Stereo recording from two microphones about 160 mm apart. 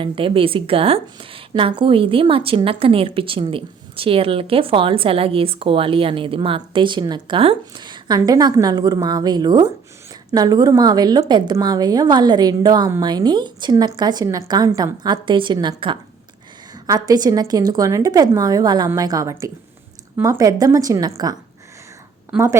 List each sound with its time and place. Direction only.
0.0 s a woman's voice: 35° right (ahead or behind)
22.3 s a woman's voice: 5° right (ahead or behind)